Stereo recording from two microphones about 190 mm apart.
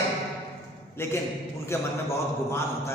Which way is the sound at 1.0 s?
15° left (ahead or behind).